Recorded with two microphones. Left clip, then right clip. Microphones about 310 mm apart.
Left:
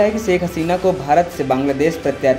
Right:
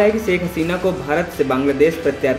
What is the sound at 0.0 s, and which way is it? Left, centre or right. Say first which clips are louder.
Speech: even; left.